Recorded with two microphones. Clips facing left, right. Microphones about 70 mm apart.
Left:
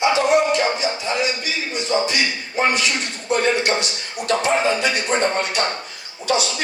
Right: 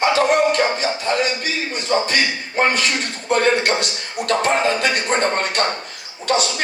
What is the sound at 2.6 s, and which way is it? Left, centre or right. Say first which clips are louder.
Speech: right 1 dB; right.